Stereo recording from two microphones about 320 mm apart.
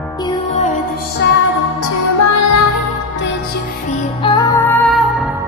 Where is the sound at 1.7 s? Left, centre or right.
Left.